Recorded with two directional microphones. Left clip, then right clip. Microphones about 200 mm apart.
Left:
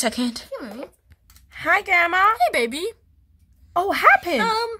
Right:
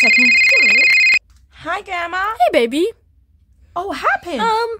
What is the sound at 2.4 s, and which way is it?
Speech, 50° right (ahead or behind).